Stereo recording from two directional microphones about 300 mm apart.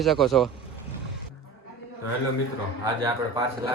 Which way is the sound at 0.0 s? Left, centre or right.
Centre.